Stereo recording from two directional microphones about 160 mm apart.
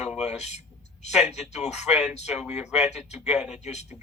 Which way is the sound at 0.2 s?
45° left (ahead or behind).